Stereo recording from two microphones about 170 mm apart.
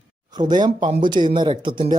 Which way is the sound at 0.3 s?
25° right (ahead or behind).